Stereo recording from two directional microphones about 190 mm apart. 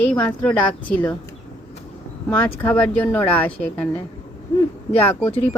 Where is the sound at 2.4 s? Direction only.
10° left (ahead or behind).